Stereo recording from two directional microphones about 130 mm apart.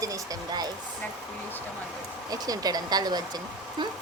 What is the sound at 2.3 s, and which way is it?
Speech, 30° right (ahead or behind).